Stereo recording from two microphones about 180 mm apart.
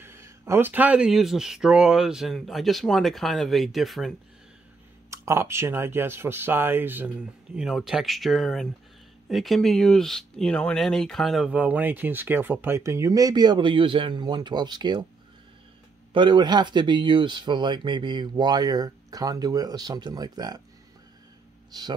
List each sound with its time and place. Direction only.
0.0 s speech: 15° right (ahead or behind)
5.1 s speech: 15° right (ahead or behind)
16.1 s speech: 25° right (ahead or behind)